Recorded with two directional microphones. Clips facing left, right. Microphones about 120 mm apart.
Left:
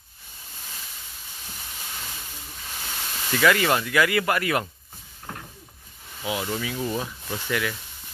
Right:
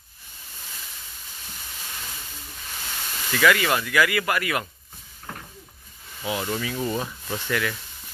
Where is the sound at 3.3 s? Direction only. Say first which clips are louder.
Even; 25° left (ahead or behind).